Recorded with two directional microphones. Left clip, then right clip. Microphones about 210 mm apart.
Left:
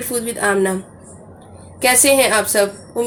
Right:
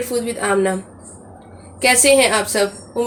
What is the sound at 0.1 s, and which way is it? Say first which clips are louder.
Speech: left 2 dB; 20° left (ahead or behind).